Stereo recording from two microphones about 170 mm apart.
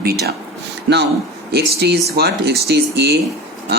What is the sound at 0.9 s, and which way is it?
Speech, 90° right.